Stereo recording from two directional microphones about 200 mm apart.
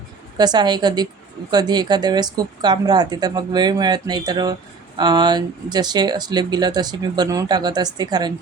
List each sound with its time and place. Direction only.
0.3 s speech: 20° right (ahead or behind)